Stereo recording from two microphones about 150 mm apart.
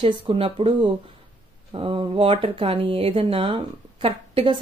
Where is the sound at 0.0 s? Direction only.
40° right (ahead or behind).